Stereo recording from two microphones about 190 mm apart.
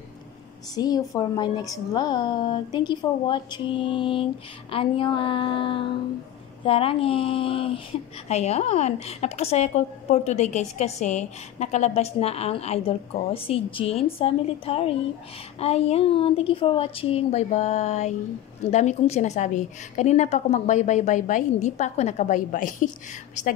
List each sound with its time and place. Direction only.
0.7 s a woman's voice: 20° left (ahead or behind); by 22.8 s 45° left (ahead or behind)